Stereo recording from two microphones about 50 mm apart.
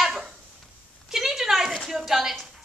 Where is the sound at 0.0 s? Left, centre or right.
Centre.